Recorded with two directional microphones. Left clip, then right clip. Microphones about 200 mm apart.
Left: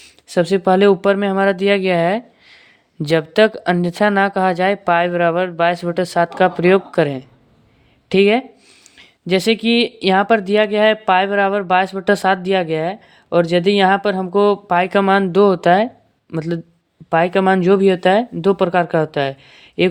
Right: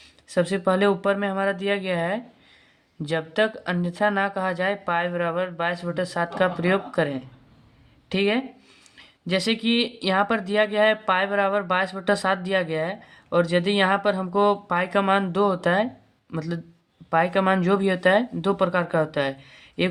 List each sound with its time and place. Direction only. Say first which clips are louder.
0.0 s speech: left 6 dB; 30° left (ahead or behind)